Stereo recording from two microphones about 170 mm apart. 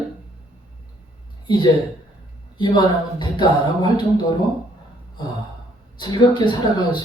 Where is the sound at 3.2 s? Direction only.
25° left (ahead or behind).